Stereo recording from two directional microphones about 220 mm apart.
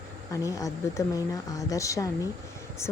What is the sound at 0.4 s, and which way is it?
Speech, 15° left (ahead or behind).